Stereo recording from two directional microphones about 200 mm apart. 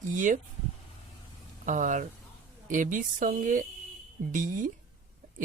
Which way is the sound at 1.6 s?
40° right (ahead or behind).